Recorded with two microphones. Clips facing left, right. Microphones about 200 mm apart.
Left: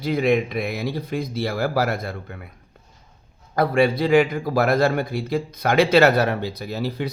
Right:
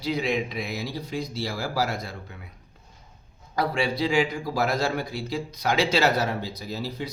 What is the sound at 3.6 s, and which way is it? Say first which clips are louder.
A man's voice: left 7 dB; 55° left (ahead or behind).